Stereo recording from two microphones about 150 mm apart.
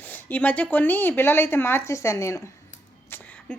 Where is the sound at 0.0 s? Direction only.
10° left (ahead or behind).